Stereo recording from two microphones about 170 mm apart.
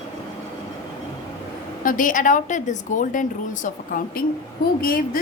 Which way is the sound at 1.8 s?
55° left (ahead or behind).